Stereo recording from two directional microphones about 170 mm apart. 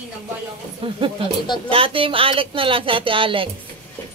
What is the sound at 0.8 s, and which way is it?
Speech, 30° right (ahead or behind).